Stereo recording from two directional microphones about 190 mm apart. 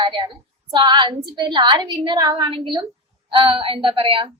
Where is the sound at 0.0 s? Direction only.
25° right (ahead or behind).